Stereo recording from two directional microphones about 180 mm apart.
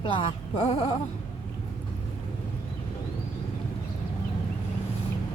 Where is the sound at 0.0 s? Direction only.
30° left (ahead or behind).